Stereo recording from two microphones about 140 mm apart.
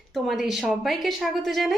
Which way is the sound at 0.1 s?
Centre (ahead or behind).